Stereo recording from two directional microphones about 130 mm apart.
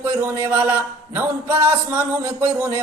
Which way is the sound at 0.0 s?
20° right (ahead or behind).